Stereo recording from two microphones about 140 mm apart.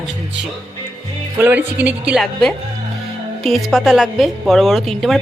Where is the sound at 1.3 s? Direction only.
15° right (ahead or behind).